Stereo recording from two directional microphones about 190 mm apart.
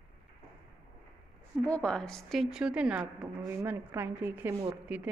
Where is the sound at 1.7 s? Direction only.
5° left (ahead or behind).